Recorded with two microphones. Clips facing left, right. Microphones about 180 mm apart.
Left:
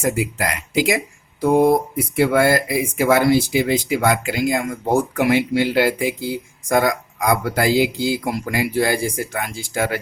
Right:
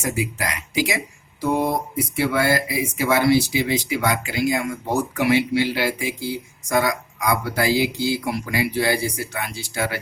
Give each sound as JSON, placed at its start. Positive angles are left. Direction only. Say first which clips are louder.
{"t": 0.0, "sound": "speech", "louder": "left 4 dB", "side_deg": 55}